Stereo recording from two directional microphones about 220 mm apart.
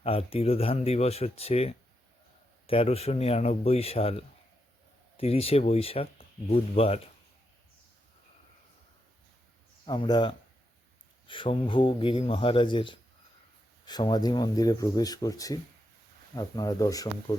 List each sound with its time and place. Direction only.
0.0 s speech: 25° left (ahead or behind)
9.8 s speech: 20° left (ahead or behind)